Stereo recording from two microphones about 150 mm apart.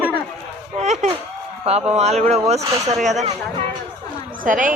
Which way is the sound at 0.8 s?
50° right (ahead or behind).